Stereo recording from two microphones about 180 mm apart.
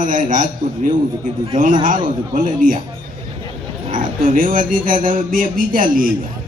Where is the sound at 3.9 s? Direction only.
50° right (ahead or behind).